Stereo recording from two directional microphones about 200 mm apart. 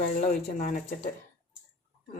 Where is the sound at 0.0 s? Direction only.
40° left (ahead or behind).